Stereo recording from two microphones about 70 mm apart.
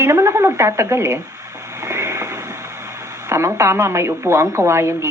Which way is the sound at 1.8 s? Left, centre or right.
Right.